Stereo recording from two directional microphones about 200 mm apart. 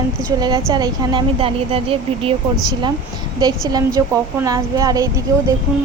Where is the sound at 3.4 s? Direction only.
20° right (ahead or behind).